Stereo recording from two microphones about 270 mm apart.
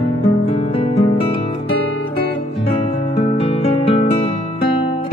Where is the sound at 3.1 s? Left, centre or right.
Left.